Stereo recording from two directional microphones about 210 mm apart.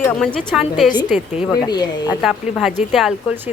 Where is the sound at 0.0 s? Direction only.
5° left (ahead or behind).